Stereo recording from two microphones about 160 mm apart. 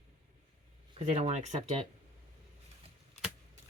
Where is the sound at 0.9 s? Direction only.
40° right (ahead or behind).